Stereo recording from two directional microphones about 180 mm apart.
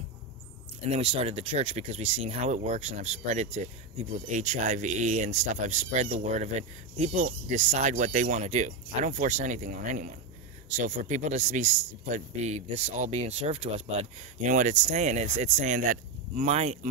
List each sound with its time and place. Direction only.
0.9 s speech: 35° right (ahead or behind)